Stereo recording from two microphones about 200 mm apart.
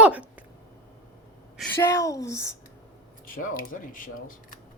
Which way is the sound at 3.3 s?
45° left (ahead or behind).